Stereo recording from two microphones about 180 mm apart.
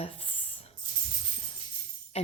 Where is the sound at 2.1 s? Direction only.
35° left (ahead or behind).